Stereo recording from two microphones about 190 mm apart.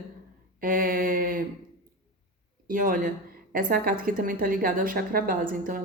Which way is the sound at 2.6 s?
45° right (ahead or behind).